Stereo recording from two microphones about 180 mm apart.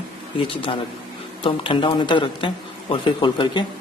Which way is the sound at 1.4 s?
30° left (ahead or behind).